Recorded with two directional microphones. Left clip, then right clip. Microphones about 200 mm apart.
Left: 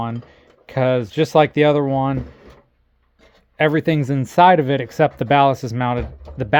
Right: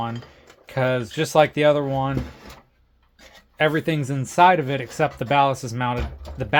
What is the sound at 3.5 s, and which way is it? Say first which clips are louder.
Speech: left 4 dB; 45° left (ahead or behind).